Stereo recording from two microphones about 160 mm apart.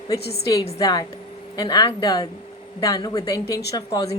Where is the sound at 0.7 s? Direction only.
20° left (ahead or behind).